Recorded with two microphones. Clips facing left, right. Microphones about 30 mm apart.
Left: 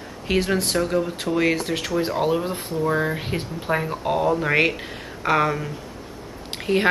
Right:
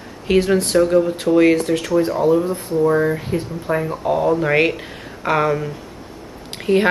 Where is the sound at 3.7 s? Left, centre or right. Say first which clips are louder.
Right 3 dB; centre.